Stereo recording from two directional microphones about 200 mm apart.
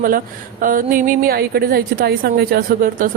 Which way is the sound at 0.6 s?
45° right (ahead or behind).